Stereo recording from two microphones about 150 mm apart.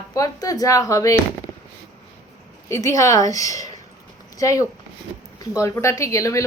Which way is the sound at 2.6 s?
20° left (ahead or behind).